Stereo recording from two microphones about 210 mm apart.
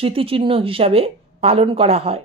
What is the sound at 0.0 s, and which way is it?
Speech, 25° right (ahead or behind).